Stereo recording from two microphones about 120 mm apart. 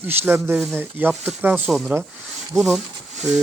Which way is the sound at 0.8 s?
15° right (ahead or behind).